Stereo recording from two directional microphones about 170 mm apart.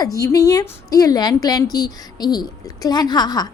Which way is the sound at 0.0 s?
20° left (ahead or behind).